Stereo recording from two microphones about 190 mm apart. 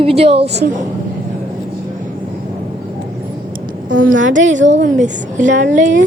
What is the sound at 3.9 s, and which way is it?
A woman's voice, 45° right (ahead or behind).